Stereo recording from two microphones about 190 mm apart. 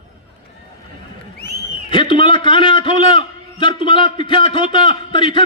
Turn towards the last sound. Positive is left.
turn(degrees=25)  # may be behind; listen again after turning